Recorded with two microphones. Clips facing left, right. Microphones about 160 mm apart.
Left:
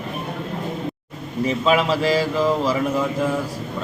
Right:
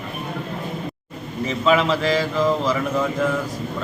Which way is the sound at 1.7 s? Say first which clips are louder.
Right 1 dB; 5° left (ahead or behind).